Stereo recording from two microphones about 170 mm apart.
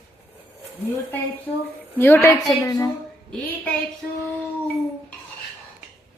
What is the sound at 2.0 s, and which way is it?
Speech, 10° left (ahead or behind).